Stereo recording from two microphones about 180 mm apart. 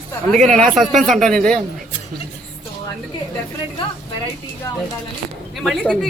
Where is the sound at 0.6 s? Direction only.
Centre (ahead or behind).